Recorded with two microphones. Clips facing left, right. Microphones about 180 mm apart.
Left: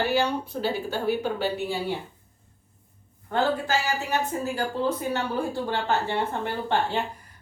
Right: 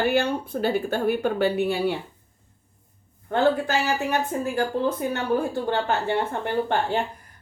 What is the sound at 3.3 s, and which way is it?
Speech, 60° right (ahead or behind).